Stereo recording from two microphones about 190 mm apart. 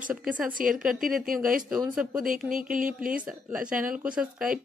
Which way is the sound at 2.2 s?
45° right (ahead or behind).